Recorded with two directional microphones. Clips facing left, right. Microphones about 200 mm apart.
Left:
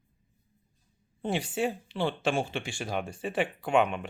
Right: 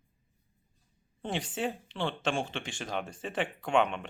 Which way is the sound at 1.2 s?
10° left (ahead or behind).